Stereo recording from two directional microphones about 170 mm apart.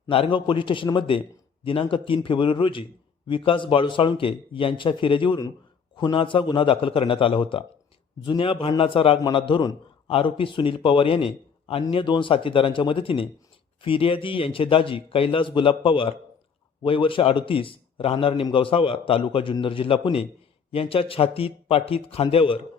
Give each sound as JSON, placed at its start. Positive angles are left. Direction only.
{"t": 0.1, "sound": "a man's voice", "side_deg": 30}